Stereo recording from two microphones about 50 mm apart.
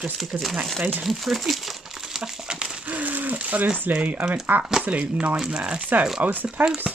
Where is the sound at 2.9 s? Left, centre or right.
Right.